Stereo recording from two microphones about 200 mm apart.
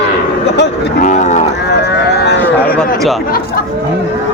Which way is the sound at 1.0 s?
40° left (ahead or behind).